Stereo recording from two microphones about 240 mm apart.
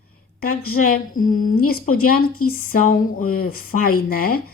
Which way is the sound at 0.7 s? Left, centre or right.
Left.